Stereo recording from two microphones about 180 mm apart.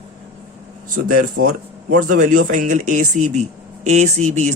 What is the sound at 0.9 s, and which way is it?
Speech, 50° right (ahead or behind).